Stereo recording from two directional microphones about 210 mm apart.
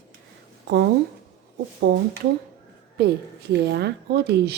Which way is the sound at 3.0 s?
50° right (ahead or behind).